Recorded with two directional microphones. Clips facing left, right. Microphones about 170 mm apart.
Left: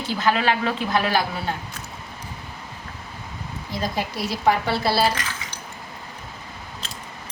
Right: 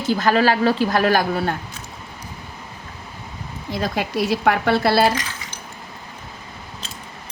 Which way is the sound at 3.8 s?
65° right (ahead or behind).